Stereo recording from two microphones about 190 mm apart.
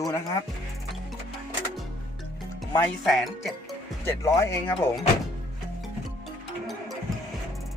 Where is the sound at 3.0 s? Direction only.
Centre (ahead or behind).